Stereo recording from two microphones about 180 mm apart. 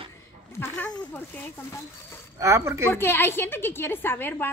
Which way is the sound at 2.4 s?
15° right (ahead or behind).